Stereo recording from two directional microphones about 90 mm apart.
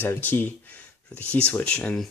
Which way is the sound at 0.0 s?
25° left (ahead or behind).